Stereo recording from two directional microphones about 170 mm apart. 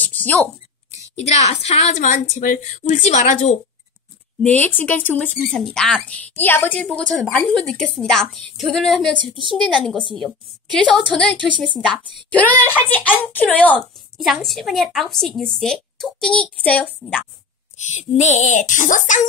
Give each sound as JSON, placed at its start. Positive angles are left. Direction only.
{"t": 0.0, "sound": "a sound", "side_deg": 10}
{"t": 1.2, "sound": "a woman's voice", "side_deg": 40}
{"t": 4.4, "sound": "a woman's voice", "side_deg": 10}
{"t": 9.1, "sound": "a woman's voice", "side_deg": -30}
{"t": 9.6, "sound": "a woman's voice", "side_deg": 0}
{"t": 9.9, "sound": "a woman's voice", "side_deg": -30}
{"t": 10.2, "sound": "a woman's voice", "side_deg": 5}
{"t": 17.7, "sound": "a woman's voice", "side_deg": 45}